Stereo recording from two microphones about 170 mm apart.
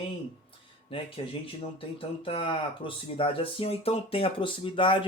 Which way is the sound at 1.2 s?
30° left (ahead or behind).